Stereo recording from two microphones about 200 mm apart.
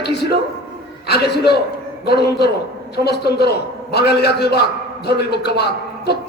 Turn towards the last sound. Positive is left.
turn(degrees=55)  # may be behind; listen again after turning